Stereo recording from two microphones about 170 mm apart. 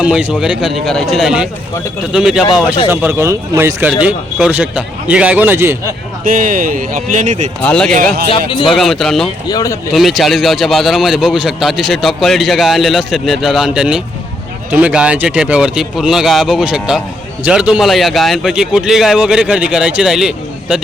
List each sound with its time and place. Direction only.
0.0 s a man's voice: 5° right (ahead or behind)
6.2 s a man's voice: 55° right (ahead or behind)
7.6 s a man's voice: 5° left (ahead or behind)
9.5 s speech: 20° left (ahead or behind)
9.9 s a man's voice: centre (ahead or behind)